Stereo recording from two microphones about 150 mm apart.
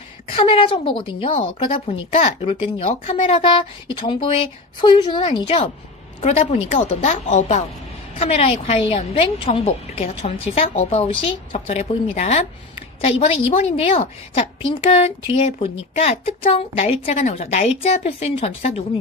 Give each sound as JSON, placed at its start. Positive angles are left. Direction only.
{"t": 0.3, "sound": "a woman's voice", "side_deg": 35}